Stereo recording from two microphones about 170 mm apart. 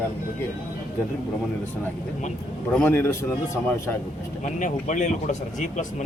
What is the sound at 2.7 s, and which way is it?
Speech, 10° left (ahead or behind).